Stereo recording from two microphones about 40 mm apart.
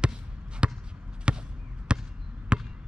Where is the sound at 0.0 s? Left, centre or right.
Right.